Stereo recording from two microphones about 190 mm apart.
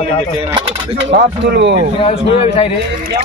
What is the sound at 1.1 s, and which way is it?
Speech, 65° right (ahead or behind).